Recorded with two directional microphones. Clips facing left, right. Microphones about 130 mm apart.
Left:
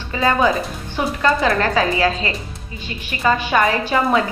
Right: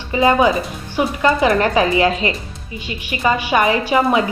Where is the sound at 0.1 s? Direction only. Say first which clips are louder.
Right 3 dB; 15° right (ahead or behind).